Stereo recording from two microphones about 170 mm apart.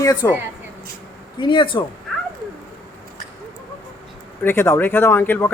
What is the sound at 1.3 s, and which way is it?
Speech, 30° left (ahead or behind).